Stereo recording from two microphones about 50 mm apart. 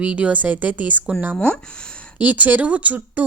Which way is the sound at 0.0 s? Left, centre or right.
Right.